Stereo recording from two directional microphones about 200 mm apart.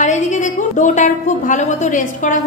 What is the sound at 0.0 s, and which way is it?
A woman's voice, 40° left (ahead or behind).